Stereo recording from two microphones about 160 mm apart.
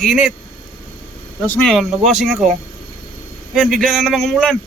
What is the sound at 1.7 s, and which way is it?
Speech, centre (ahead or behind).